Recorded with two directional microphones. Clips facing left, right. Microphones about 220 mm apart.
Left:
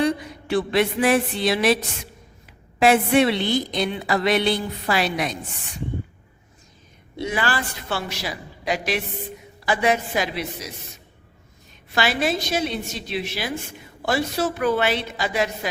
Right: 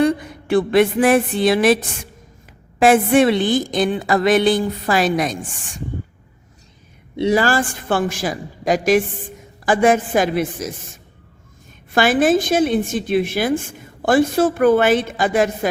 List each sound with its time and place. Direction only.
0.0 s a sound: 55° right (ahead or behind)
2.7 s a woman's voice: 50° right (ahead or behind)
7.2 s a woman's voice: 40° right (ahead or behind)